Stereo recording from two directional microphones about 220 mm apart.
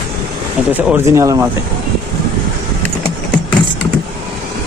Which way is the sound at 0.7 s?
10° right (ahead or behind).